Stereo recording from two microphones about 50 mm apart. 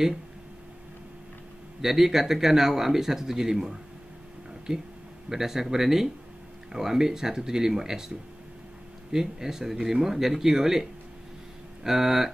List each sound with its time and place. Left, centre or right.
1.8 s speech: centre
5.3 s speech: centre